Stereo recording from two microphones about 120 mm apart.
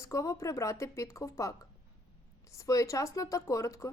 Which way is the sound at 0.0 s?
25° left (ahead or behind).